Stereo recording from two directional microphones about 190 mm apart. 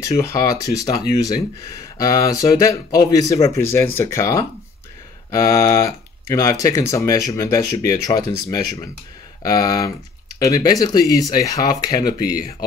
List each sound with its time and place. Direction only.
0.0 s speech: 15° left (ahead or behind)